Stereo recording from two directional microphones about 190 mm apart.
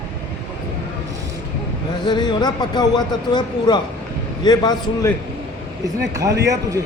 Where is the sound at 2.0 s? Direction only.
25° left (ahead or behind).